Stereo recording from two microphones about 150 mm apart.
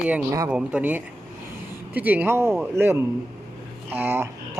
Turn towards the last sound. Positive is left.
turn(degrees=-15)  # may be behind; listen again after turning